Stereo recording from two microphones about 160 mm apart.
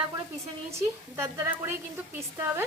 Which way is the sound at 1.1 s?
15° right (ahead or behind).